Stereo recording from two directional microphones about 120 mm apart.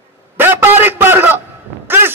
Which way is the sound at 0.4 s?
15° right (ahead or behind).